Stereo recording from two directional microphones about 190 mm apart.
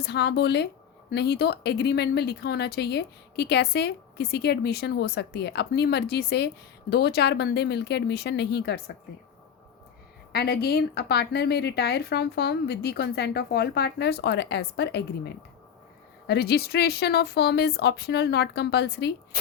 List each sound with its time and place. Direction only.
0.0 s speech: 60° left (ahead or behind)
10.3 s speech: 55° left (ahead or behind)